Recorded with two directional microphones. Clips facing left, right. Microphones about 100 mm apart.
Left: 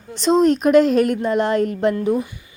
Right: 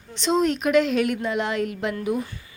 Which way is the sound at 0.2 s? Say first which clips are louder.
Left 6 dB; 40° left (ahead or behind).